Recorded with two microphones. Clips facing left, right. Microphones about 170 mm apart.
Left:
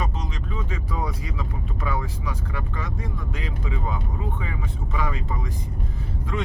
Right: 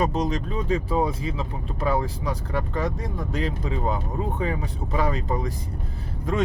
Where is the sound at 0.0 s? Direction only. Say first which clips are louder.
Right 8 dB; 40° right (ahead or behind).